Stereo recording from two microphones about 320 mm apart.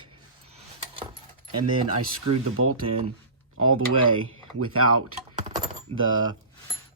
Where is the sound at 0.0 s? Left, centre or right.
Centre.